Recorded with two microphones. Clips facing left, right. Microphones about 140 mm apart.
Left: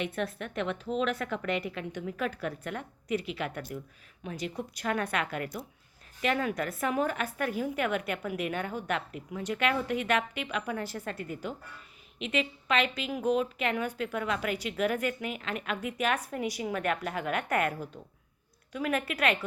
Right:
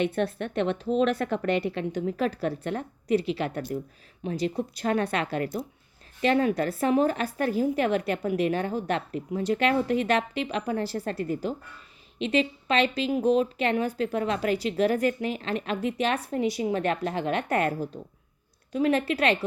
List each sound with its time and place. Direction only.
0.0 s a woman's voice: 30° right (ahead or behind)